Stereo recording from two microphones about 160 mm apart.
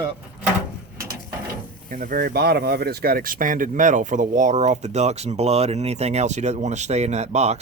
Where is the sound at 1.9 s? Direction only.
60° right (ahead or behind).